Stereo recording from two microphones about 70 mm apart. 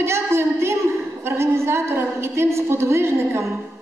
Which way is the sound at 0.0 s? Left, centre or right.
Right.